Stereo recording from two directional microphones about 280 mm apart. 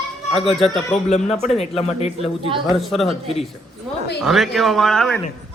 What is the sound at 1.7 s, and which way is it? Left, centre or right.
Speech, left.